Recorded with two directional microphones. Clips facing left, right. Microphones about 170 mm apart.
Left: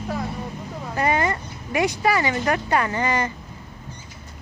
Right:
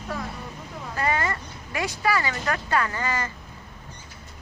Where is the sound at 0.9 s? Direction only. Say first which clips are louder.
Left 4 dB; 20° left (ahead or behind).